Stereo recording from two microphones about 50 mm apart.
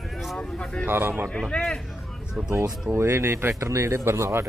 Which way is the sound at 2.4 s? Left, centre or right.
Centre.